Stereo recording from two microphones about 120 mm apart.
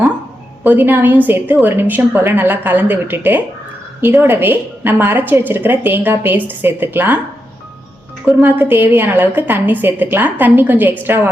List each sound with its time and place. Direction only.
0.6 s a woman's voice: 15° right (ahead or behind)
8.2 s a woman's voice: 15° right (ahead or behind)